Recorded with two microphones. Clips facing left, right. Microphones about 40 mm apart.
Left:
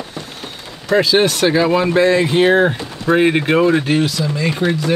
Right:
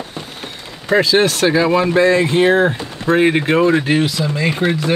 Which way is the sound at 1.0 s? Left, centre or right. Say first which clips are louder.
Even; centre.